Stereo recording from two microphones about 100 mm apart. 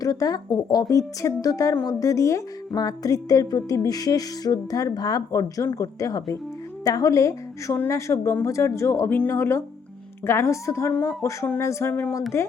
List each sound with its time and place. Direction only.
0.0 s speech: 35° left (ahead or behind)
9.0 s speech: 20° left (ahead or behind)
9.3 s speech: 30° left (ahead or behind)